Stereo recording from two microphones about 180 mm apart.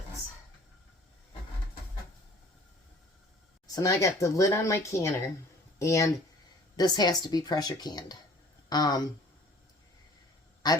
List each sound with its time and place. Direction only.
3.7 s speech: 20° left (ahead or behind)
10.6 s speech: 20° left (ahead or behind)